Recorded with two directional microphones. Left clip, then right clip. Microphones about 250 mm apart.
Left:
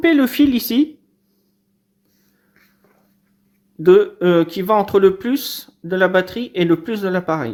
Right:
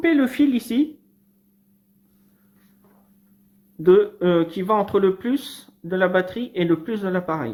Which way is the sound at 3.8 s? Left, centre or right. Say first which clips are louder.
Left 4 dB; left.